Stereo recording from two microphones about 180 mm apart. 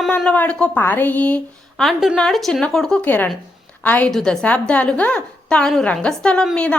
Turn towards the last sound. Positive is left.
turn(degrees=5)  # may be behind; listen again after turning